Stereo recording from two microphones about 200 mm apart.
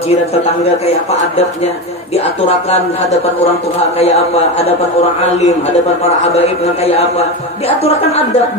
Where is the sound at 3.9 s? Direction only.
30° left (ahead or behind).